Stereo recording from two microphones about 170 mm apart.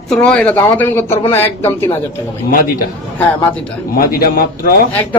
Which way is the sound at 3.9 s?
60° left (ahead or behind).